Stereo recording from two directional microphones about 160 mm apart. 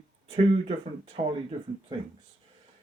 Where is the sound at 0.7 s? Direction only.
35° right (ahead or behind).